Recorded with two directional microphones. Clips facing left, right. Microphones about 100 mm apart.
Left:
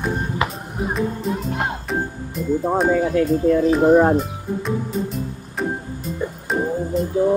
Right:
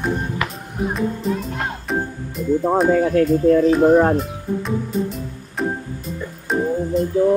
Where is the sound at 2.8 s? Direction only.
15° left (ahead or behind).